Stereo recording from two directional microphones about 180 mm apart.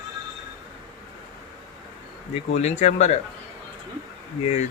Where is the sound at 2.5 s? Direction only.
40° left (ahead or behind).